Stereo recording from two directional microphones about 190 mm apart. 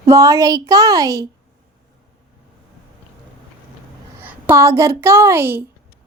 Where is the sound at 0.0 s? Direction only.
15° right (ahead or behind).